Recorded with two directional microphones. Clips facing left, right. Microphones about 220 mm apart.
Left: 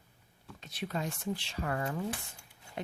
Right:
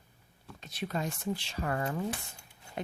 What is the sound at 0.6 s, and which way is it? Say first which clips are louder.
Speech: right 2 dB; 40° right (ahead or behind).